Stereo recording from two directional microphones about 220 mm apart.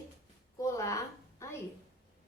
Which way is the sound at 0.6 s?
15° left (ahead or behind).